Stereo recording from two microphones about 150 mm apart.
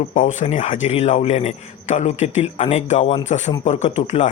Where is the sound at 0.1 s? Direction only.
55° left (ahead or behind).